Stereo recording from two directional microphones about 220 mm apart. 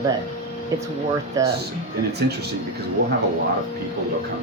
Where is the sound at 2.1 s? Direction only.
45° right (ahead or behind).